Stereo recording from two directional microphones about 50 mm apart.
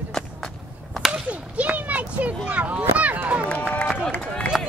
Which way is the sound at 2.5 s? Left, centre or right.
Right.